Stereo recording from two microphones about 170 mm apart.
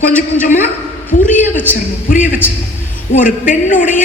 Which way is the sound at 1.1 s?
50° left (ahead or behind).